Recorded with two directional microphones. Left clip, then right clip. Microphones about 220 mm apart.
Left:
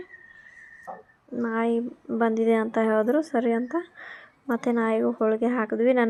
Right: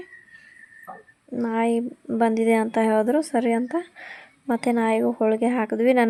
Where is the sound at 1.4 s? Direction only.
30° right (ahead or behind).